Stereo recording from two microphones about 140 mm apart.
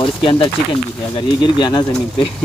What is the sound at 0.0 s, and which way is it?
Speech, 40° left (ahead or behind).